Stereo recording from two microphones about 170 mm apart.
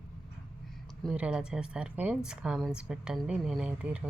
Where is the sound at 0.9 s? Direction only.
5° right (ahead or behind).